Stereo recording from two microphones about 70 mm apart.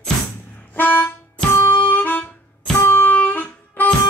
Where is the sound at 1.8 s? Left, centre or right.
Left.